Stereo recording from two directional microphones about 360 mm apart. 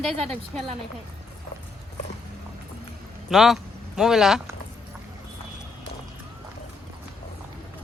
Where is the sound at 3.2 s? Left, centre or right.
Centre.